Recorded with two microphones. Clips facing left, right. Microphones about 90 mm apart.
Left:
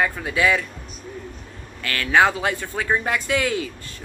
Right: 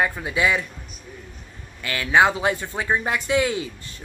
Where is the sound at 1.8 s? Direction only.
20° right (ahead or behind).